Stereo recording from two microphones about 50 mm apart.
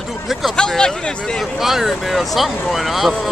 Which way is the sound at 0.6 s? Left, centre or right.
Centre.